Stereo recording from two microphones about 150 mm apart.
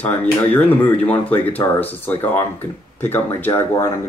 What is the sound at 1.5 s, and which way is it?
Speech, 10° left (ahead or behind).